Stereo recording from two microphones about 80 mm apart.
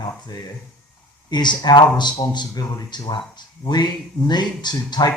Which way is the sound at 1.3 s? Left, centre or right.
Left.